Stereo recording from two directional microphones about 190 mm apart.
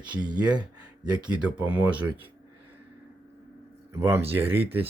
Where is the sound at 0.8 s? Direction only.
5° right (ahead or behind).